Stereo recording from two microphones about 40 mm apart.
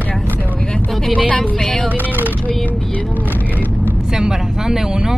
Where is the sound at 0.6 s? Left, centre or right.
Left.